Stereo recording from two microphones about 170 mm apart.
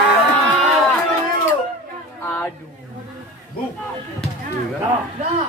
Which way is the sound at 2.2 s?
10° left (ahead or behind).